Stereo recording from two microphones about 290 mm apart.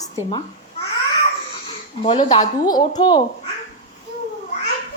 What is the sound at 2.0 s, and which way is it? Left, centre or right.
A woman's voice, centre.